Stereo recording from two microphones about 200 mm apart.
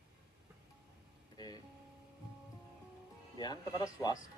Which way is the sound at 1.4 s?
20° left (ahead or behind).